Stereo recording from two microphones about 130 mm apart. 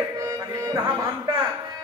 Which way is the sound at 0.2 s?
30° right (ahead or behind).